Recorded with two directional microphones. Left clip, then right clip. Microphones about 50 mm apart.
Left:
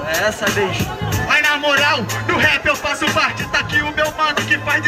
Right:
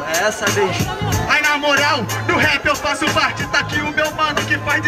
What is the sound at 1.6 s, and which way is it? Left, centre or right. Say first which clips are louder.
Speech: even; centre.